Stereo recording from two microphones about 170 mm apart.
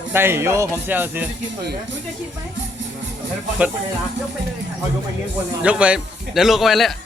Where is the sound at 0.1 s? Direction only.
15° right (ahead or behind).